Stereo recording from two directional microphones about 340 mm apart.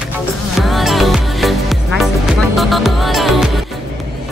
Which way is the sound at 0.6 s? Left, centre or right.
Centre.